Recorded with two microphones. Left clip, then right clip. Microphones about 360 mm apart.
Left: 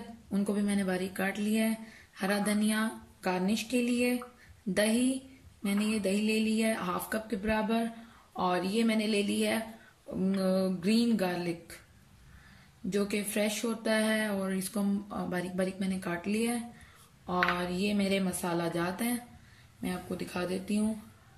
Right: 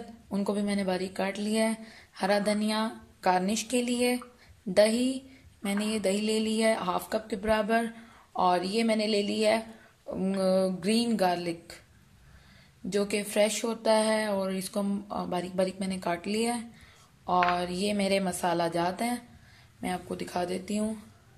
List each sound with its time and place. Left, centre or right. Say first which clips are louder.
0.3 s speech: right 2 dB; centre
6.1 s speech: right 2 dB; centre
12.9 s speech: right 4 dB; centre